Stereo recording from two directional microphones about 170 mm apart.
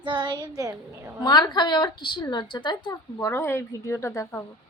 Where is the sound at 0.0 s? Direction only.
25° right (ahead or behind).